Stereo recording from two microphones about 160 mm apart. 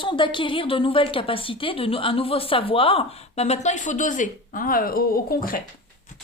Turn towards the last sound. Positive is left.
turn(degrees=65)  # may be behind; listen again after turning